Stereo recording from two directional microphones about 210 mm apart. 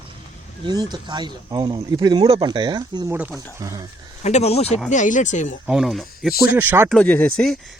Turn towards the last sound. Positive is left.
turn(degrees=5)  # may be behind; listen again after turning